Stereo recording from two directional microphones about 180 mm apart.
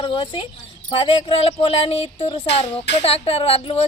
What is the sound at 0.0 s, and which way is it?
Speech, 25° left (ahead or behind).